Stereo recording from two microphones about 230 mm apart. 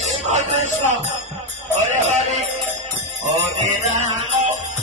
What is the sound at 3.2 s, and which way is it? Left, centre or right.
Music, right.